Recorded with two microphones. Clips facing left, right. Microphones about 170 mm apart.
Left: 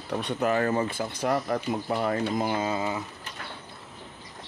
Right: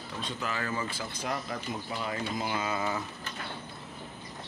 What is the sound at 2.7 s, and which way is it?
Speech, 20° left (ahead or behind).